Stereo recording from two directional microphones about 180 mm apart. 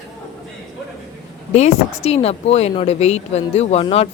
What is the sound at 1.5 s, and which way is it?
Speech, 35° left (ahead or behind).